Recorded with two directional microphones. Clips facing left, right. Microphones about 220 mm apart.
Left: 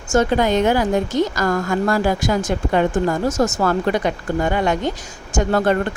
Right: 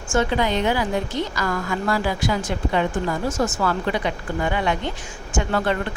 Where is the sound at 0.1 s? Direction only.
45° left (ahead or behind).